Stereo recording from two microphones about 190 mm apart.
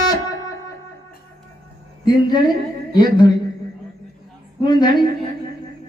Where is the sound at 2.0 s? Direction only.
20° left (ahead or behind).